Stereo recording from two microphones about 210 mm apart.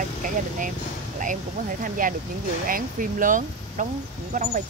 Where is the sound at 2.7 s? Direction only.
40° right (ahead or behind).